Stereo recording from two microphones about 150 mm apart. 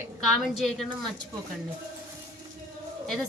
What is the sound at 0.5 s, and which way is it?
Speech, centre (ahead or behind).